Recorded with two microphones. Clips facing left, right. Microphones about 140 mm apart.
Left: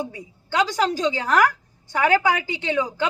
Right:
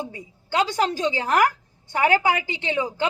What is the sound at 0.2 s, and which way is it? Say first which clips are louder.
A woman's voice: even; 25° right (ahead or behind).